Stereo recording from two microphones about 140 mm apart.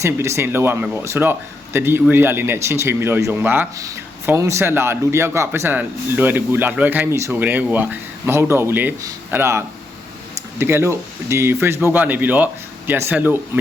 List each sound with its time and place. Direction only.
0.0 s speech: 20° right (ahead or behind)